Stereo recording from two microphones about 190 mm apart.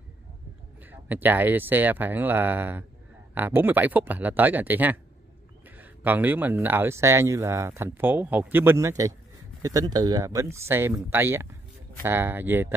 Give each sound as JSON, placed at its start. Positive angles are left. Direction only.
{"t": 0.8, "sound": "speech", "side_deg": -10}